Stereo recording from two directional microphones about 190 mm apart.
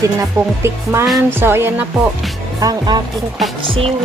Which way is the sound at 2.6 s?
20° right (ahead or behind).